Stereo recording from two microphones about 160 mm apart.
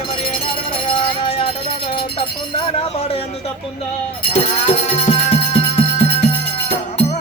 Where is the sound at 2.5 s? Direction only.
35° left (ahead or behind).